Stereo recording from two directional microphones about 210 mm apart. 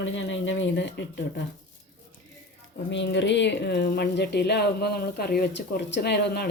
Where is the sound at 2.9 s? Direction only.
60° left (ahead or behind).